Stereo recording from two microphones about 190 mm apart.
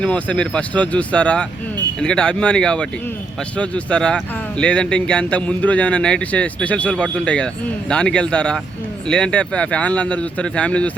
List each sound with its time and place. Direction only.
0.0 s speech: 5° left (ahead or behind)